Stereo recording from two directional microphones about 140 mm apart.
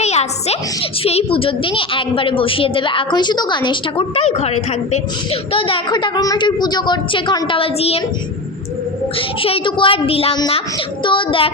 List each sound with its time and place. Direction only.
0.0 s a child's voice: 50° left (ahead or behind)
9.1 s a child's voice: 40° left (ahead or behind)